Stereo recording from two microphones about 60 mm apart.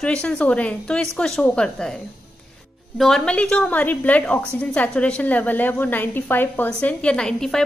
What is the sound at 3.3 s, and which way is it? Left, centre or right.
A woman's voice, centre.